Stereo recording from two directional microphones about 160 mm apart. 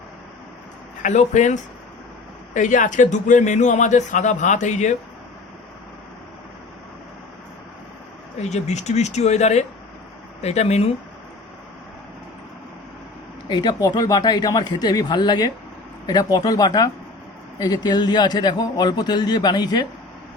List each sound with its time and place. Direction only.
1.0 s a man's voice: 50° left (ahead or behind)
8.4 s a man's voice: 45° left (ahead or behind)
13.5 s a man's voice: 25° left (ahead or behind)